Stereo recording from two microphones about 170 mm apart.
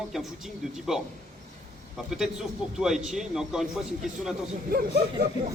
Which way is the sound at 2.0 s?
Centre (ahead or behind).